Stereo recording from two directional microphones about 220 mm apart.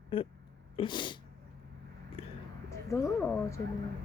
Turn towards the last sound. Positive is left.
turn(degrees=10)  # may be behind; listen again after turning